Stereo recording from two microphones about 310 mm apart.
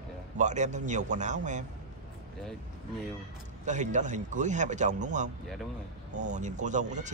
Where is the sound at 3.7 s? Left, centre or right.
Right.